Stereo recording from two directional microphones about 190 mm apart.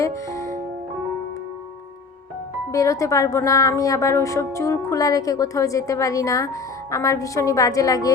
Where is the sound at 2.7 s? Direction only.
15° left (ahead or behind).